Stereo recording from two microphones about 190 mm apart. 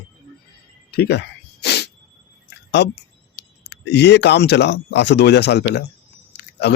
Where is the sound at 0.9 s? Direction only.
60° left (ahead or behind).